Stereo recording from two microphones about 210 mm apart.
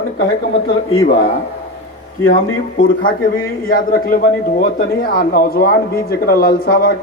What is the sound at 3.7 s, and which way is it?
Speech, 40° left (ahead or behind).